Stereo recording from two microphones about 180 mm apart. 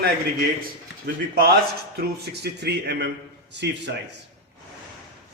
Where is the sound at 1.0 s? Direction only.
55° right (ahead or behind); by 3.9 s 75° right (ahead or behind).